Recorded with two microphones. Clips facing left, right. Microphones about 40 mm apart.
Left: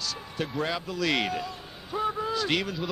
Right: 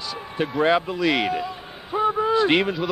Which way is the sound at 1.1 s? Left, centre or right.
Centre.